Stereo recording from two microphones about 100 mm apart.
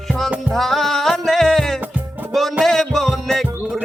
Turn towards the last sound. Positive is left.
turn(degrees=0)  # may be behind; listen again after turning